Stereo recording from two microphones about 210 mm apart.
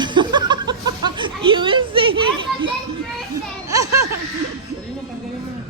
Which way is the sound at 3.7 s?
15° right (ahead or behind).